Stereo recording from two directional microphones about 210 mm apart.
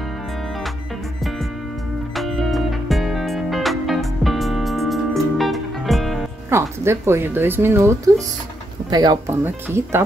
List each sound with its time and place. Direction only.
2.1 s music: centre (ahead or behind)
6.5 s speech: 10° right (ahead or behind)